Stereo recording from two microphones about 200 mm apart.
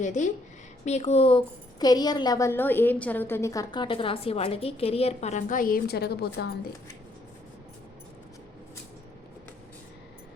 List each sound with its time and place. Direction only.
0.0 s a woman's voice: 35° left (ahead or behind); by 6.5 s 55° left (ahead or behind)